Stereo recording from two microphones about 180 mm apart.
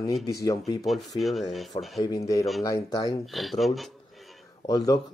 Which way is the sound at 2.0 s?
20° left (ahead or behind).